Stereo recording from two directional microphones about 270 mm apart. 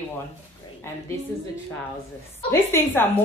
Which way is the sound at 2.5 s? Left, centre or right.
Centre.